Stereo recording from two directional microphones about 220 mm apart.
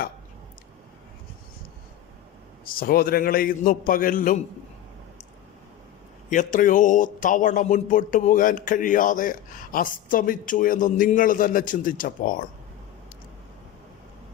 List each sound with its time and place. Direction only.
2.6 s speech: 40° left (ahead or behind)
6.3 s speech: 35° left (ahead or behind)